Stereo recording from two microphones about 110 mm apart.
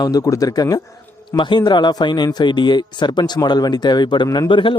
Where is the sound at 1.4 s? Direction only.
45° left (ahead or behind).